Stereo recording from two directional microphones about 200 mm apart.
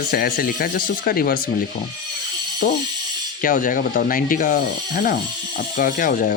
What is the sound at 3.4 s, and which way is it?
Rub, 40° left (ahead or behind).